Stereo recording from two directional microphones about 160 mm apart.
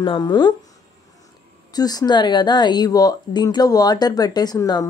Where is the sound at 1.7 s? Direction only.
25° left (ahead or behind).